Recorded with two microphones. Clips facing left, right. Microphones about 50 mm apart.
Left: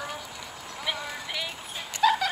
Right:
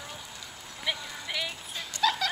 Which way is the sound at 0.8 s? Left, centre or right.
Centre.